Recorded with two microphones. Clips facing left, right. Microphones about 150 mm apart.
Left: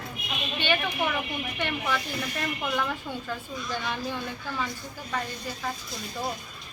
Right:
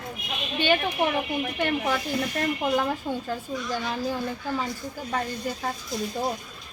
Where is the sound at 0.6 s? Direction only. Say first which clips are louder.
Right 4 dB; 40° right (ahead or behind).